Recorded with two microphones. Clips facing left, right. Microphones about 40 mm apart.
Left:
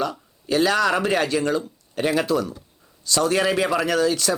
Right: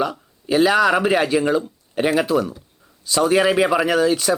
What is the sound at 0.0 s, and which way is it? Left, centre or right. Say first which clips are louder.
Speech: right 3 dB; centre.